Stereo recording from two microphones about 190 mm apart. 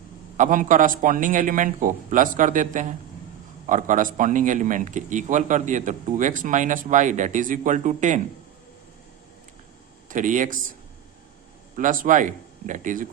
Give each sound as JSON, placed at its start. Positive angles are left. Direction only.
{"t": 0.3, "sound": "a man's voice", "side_deg": -40}
{"t": 10.1, "sound": "a man's voice", "side_deg": -40}
{"t": 11.8, "sound": "a man's voice", "side_deg": -45}